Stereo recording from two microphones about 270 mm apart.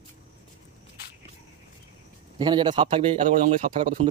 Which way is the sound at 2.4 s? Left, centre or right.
Centre.